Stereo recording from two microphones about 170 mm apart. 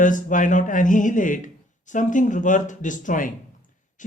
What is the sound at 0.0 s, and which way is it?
Speech, 50° left (ahead or behind).